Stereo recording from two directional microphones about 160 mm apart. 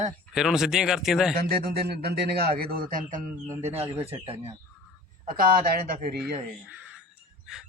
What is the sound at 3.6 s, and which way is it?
Speech, 40° right (ahead or behind).